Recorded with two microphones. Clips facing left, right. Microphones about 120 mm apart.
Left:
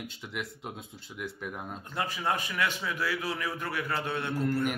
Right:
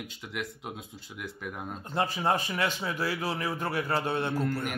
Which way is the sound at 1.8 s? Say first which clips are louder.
Right 4 dB; 30° right (ahead or behind).